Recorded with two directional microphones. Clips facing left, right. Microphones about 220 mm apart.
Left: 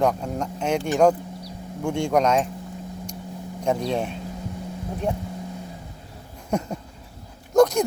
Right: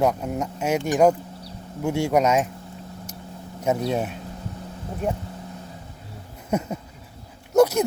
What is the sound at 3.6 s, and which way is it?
Speech, 5° right (ahead or behind).